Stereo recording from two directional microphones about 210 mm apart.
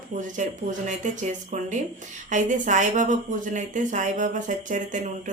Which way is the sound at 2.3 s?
35° right (ahead or behind).